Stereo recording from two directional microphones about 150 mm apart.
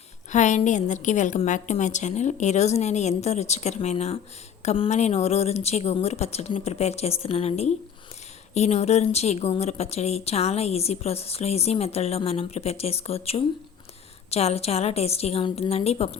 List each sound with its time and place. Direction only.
0.3 s speech: 55° left (ahead or behind)